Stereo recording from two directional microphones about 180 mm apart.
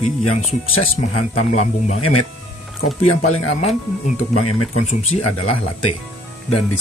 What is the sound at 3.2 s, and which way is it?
Speech, 40° left (ahead or behind).